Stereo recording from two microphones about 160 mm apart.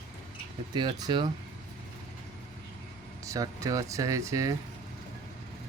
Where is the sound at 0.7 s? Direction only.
30° right (ahead or behind).